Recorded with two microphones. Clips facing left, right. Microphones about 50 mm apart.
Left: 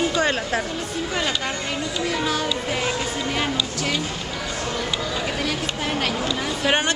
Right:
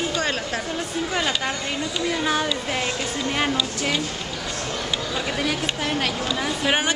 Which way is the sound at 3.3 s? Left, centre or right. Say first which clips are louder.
Right 1 dB; centre.